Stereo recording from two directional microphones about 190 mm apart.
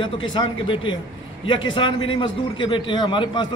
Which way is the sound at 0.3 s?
25° left (ahead or behind).